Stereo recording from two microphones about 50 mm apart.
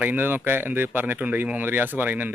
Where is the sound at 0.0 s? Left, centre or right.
Right.